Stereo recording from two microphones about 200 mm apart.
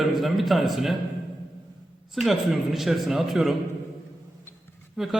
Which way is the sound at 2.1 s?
Centre (ahead or behind).